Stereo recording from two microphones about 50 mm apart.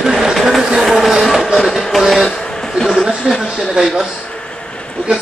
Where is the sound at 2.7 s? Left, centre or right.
Centre.